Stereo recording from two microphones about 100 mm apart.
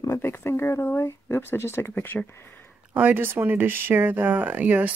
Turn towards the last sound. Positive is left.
turn(degrees=-15)  # may be behind; listen again after turning